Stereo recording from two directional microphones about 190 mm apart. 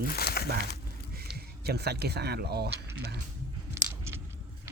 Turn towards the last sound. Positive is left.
turn(degrees=-15)  # may be behind; listen again after turning